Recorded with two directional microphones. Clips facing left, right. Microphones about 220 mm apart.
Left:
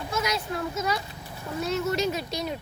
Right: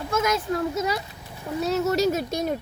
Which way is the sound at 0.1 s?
50° right (ahead or behind).